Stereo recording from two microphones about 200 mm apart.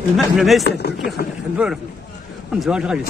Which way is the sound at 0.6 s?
55° left (ahead or behind).